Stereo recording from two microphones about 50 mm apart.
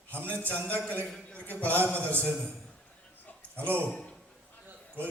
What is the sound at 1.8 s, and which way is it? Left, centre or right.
Speech, left.